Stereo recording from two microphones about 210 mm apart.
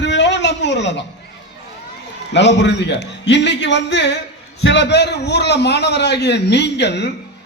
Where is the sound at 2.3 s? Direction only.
55° left (ahead or behind).